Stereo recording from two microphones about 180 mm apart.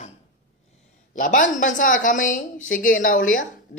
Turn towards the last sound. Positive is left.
turn(degrees=45)  # may be behind; listen again after turning